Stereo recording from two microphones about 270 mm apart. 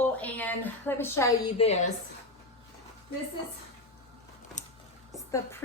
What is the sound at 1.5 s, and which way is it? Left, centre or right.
Speech, left.